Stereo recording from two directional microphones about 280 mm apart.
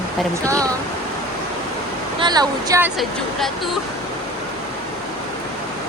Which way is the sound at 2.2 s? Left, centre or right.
Centre.